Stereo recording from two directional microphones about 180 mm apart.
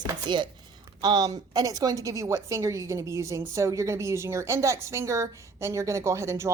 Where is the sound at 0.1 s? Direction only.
25° right (ahead or behind).